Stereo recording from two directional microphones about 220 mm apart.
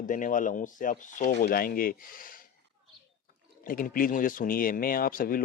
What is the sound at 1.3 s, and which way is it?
Speech, 45° left (ahead or behind).